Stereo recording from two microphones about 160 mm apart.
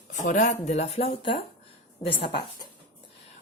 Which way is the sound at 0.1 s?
50° left (ahead or behind).